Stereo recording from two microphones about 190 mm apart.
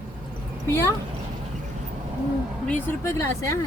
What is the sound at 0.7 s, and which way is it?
Speech, 15° left (ahead or behind).